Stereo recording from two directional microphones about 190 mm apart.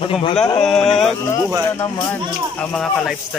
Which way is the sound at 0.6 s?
5° left (ahead or behind).